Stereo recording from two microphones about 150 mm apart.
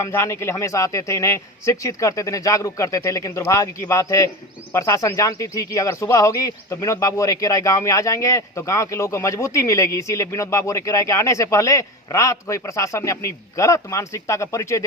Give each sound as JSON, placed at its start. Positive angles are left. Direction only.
{"t": 0.0, "sound": "speech", "side_deg": 20}